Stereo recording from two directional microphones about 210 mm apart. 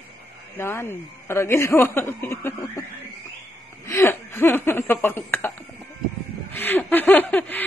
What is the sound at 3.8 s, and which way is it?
Speech, 10° left (ahead or behind).